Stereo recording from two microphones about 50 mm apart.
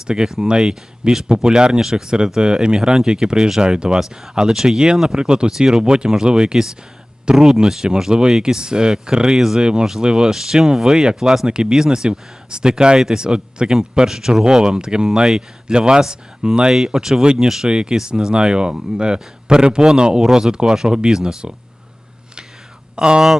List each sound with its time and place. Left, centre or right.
0.1 s speech: centre
23.0 s speech: centre